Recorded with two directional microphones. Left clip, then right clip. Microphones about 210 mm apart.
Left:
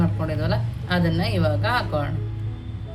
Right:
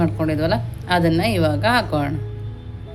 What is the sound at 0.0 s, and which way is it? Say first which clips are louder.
A woman's voice: right 7 dB; 35° right (ahead or behind).